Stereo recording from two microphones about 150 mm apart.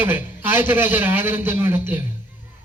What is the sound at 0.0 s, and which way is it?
Speech, 15° right (ahead or behind).